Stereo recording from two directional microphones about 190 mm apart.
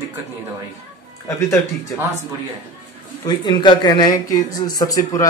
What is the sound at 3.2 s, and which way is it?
Speech, 20° left (ahead or behind).